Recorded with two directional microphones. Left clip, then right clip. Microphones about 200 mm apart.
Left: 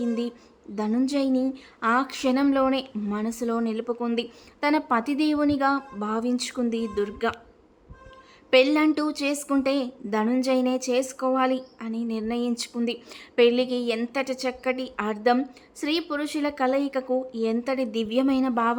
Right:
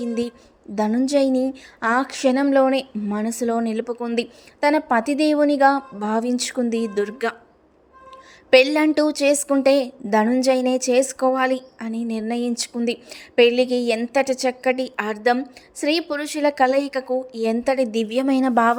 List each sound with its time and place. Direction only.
0.0 s a woman's voice: 20° right (ahead or behind)
8.4 s a woman's voice: 15° right (ahead or behind)